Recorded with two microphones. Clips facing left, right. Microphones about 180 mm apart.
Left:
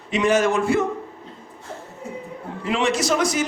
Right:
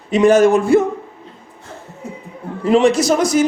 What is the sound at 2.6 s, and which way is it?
Speech, 40° right (ahead or behind).